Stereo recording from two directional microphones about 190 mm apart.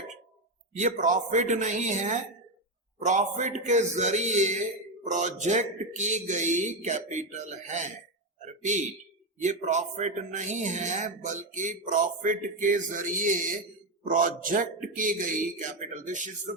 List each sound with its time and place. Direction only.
0.8 s speech: 40° right (ahead or behind)
9.4 s a man's voice: 40° right (ahead or behind)